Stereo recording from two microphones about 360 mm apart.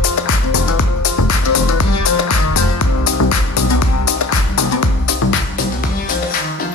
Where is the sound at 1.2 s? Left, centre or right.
Left.